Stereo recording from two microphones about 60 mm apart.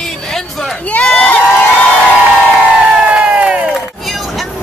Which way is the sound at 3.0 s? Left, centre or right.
Centre.